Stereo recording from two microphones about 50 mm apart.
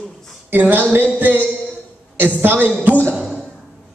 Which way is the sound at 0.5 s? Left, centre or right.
Right.